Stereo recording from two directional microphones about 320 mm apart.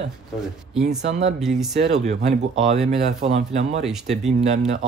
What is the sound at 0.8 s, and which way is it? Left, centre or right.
Speech, right.